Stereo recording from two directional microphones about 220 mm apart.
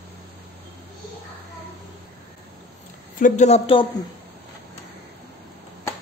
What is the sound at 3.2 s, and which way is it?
Speech, 30° left (ahead or behind).